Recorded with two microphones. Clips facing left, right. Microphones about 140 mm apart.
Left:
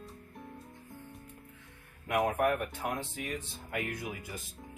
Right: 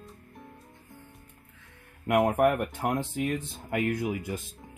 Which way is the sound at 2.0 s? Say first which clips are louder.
Right 6 dB; 55° right (ahead or behind).